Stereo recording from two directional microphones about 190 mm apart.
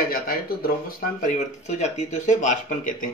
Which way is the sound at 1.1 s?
40° left (ahead or behind).